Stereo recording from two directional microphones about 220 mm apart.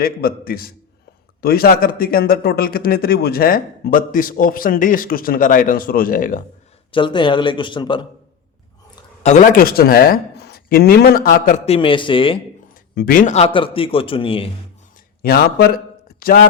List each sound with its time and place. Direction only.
0.0 s speech: 40° left (ahead or behind)
6.9 s a man's voice: 20° left (ahead or behind)
9.2 s speech: 35° left (ahead or behind)
12.9 s a man's voice: 40° left (ahead or behind); by 14.5 s 25° left (ahead or behind)
15.2 s a man's voice: 45° left (ahead or behind)